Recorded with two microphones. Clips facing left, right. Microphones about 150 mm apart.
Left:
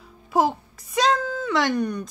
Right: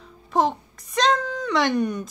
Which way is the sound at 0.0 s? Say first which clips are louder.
Even; 5° left (ahead or behind).